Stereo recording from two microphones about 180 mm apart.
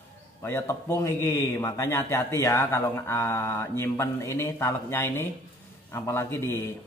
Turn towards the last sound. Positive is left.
turn(degrees=15)  # may be behind; listen again after turning